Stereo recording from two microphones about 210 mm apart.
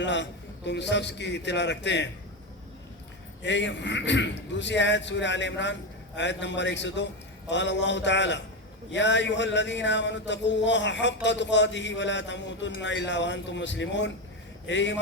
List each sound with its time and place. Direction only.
0.0 s speech: 60° left (ahead or behind)
3.4 s speech: 60° left (ahead or behind)